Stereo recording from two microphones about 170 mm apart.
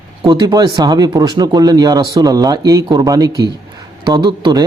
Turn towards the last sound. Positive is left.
turn(degrees=-25)  # may be behind; listen again after turning